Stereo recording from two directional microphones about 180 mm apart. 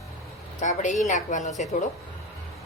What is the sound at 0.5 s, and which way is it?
Speech, 45° left (ahead or behind).